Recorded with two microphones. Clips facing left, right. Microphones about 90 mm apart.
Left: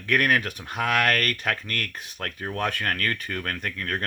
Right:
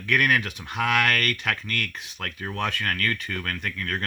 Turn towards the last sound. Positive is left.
turn(degrees=35)  # may be behind; listen again after turning